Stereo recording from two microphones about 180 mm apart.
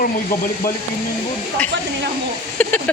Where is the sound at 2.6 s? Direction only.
10° left (ahead or behind).